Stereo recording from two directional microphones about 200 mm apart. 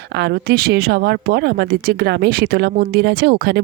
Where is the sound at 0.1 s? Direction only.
55° right (ahead or behind).